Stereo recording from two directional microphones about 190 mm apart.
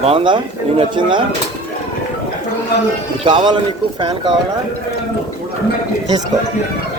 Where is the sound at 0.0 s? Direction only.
30° right (ahead or behind).